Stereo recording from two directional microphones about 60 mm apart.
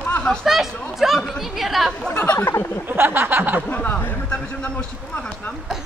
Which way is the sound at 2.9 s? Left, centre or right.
Right.